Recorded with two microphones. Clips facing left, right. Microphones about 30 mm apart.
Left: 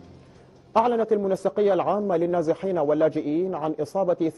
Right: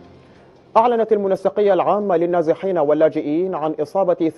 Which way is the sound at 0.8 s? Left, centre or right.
Right.